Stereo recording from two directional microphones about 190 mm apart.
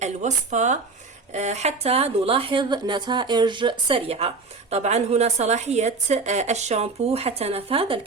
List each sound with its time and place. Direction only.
0.0 s a woman's voice: 40° right (ahead or behind)